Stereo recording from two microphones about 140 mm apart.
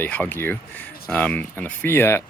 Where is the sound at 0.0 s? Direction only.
10° left (ahead or behind).